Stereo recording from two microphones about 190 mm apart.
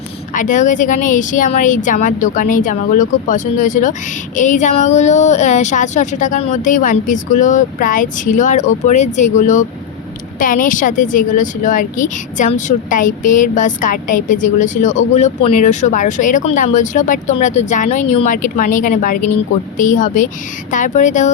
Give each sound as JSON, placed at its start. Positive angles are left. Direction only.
{"t": 0.3, "sound": "speech", "side_deg": 40}